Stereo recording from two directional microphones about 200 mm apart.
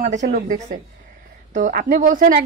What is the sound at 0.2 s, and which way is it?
A woman's voice, 50° right (ahead or behind).